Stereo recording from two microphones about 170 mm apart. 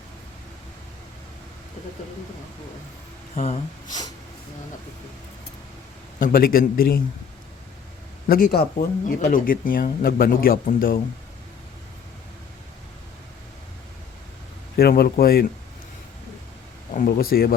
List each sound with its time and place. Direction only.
3.3 s speech: 40° left (ahead or behind)
6.1 s speech: 55° left (ahead or behind)
8.3 s speech: 55° left (ahead or behind)
14.8 s speech: 65° left (ahead or behind)
16.9 s speech: 55° left (ahead or behind)